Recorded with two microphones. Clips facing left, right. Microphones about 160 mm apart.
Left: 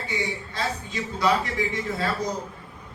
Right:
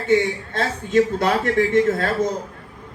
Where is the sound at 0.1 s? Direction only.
50° right (ahead or behind).